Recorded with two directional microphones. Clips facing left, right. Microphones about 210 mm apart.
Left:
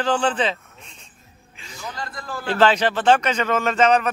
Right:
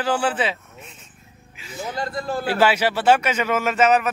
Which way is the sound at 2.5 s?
10° right (ahead or behind).